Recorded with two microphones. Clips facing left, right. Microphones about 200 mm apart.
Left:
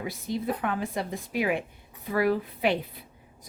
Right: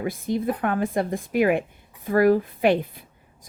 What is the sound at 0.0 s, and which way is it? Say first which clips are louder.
A woman's voice: right 6 dB; 50° right (ahead or behind).